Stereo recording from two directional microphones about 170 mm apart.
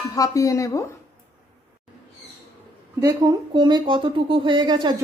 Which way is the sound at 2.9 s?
20° right (ahead or behind).